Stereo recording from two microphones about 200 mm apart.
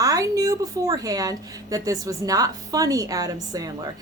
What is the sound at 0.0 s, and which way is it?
A woman's voice, 15° right (ahead or behind).